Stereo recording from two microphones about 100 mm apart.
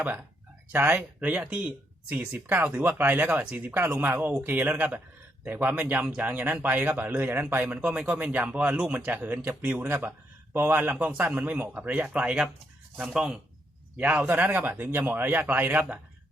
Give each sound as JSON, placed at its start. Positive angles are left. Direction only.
{"t": 0.0, "sound": "speech", "side_deg": -15}